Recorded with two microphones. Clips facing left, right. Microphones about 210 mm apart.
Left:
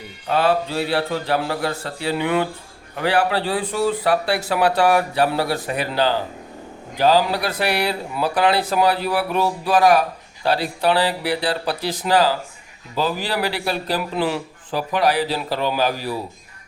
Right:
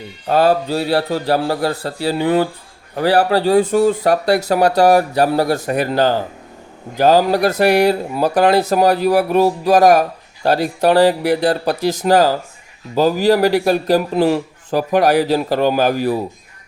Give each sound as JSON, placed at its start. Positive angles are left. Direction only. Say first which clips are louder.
{"t": 0.3, "sound": "a man's voice", "louder": "right 5 dB", "side_deg": -40}